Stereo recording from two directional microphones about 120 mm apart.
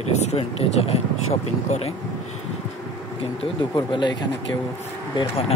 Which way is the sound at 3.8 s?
40° left (ahead or behind).